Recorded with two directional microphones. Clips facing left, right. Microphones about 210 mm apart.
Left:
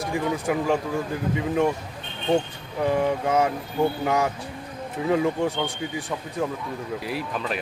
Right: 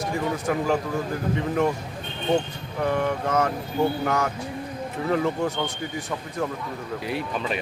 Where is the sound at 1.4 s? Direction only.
10° left (ahead or behind).